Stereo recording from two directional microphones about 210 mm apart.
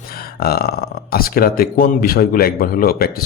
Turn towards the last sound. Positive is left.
turn(degrees=45)  # may be behind; listen again after turning